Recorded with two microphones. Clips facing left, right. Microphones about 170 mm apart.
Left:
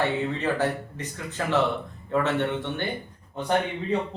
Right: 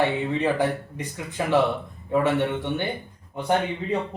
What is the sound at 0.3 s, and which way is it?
Speech, 10° right (ahead or behind).